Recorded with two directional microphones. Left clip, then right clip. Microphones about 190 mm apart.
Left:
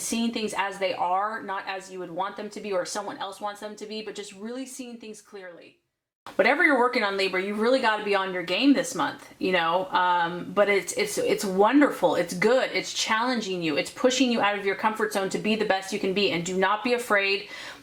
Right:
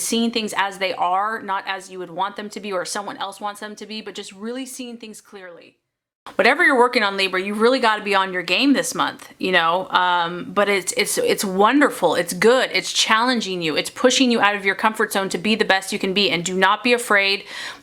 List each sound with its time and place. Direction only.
0.1 s speech: 25° right (ahead or behind)
6.3 s speech: 25° right (ahead or behind)